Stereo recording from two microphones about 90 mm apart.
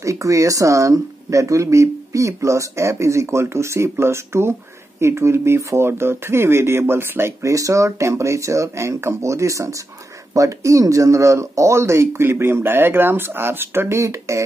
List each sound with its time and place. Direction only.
0.0 s speech: 35° right (ahead or behind)